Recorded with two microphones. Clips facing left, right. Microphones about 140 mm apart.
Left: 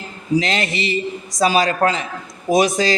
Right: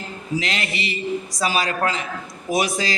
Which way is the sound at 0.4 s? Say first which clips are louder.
Left 5 dB; 25° left (ahead or behind).